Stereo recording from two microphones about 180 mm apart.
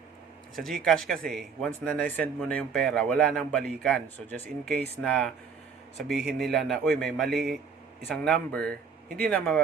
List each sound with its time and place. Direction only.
0.5 s speech: centre (ahead or behind)